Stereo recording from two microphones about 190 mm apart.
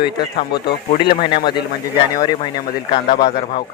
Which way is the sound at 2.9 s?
20° left (ahead or behind).